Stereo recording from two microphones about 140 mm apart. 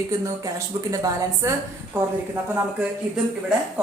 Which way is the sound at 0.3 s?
25° right (ahead or behind).